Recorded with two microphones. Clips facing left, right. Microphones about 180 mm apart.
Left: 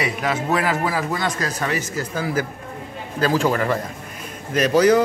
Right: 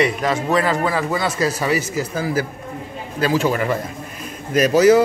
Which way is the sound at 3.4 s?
20° right (ahead or behind).